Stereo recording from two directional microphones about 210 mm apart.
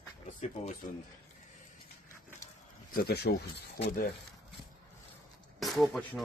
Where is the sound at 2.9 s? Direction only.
50° left (ahead or behind).